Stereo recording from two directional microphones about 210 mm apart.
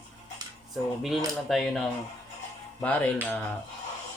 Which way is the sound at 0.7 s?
Centre (ahead or behind).